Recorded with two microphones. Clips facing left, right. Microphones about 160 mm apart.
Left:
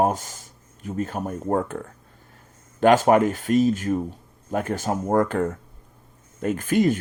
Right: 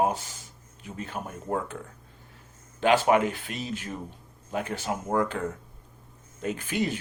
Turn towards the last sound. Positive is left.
turn(degrees=45)  # may be behind; listen again after turning